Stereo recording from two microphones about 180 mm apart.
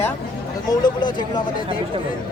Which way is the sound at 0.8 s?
25° left (ahead or behind).